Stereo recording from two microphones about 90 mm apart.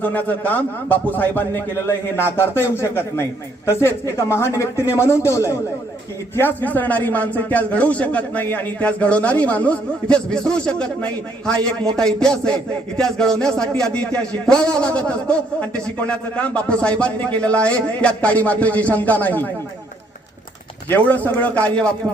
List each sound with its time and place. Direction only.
0.0 s a man's voice: 20° left (ahead or behind)
20.9 s speech: 20° left (ahead or behind)